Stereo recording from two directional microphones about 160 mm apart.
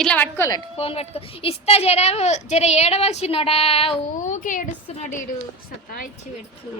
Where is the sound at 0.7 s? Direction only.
40° left (ahead or behind); by 5.1 s 55° left (ahead or behind).